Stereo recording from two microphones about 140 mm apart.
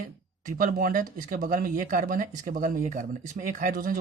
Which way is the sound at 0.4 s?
70° right (ahead or behind).